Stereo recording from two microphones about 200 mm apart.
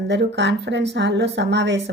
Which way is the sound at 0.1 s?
60° right (ahead or behind).